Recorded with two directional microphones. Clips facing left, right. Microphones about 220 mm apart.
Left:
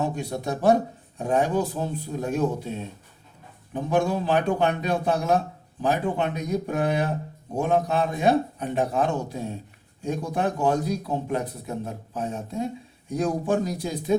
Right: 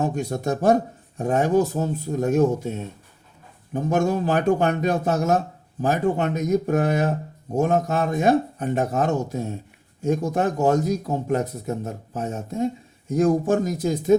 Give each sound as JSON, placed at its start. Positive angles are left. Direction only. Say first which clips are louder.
{"t": 0.0, "sound": "a man's voice", "louder": "right 3 dB", "side_deg": -45}